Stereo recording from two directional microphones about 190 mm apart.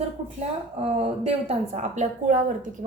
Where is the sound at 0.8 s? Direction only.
35° right (ahead or behind).